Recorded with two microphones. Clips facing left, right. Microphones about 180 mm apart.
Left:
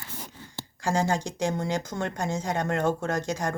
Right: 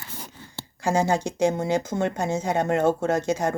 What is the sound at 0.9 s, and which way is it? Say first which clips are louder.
Speech: right 4 dB; 20° right (ahead or behind).